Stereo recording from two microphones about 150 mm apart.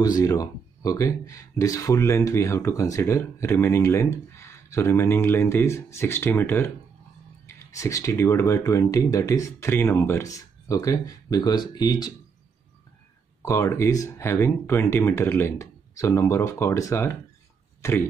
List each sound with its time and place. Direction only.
0.0 s speech: 25° left (ahead or behind)
13.4 s speech: 20° left (ahead or behind)